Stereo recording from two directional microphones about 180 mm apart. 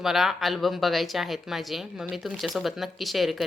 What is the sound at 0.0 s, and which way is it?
Speech, centre (ahead or behind).